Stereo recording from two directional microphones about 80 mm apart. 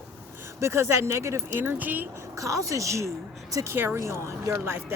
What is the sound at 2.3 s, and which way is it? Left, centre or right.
Speech, right.